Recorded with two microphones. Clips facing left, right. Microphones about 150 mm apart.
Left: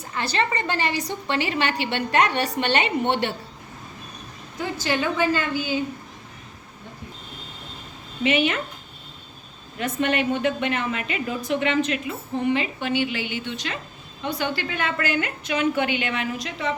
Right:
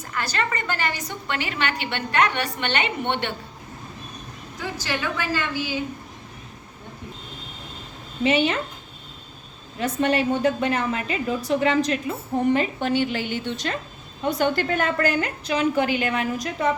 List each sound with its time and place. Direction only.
0.1 s a woman's voice: 25° left (ahead or behind)
4.8 s a woman's voice: 25° left (ahead or behind)
8.2 s a woman's voice: 30° right (ahead or behind)
9.7 s a woman's voice: 35° right (ahead or behind)